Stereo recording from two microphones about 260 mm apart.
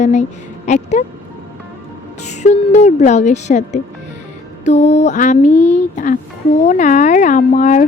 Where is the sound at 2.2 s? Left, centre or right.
Left.